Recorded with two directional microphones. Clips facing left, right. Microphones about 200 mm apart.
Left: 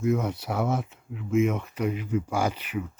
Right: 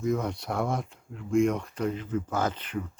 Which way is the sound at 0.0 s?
5° left (ahead or behind).